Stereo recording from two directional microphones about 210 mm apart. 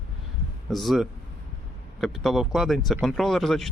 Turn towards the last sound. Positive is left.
turn(degrees=0)  # may be behind; listen again after turning